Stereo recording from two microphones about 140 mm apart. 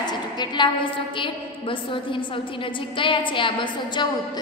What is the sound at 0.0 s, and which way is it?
A woman's voice, 30° left (ahead or behind).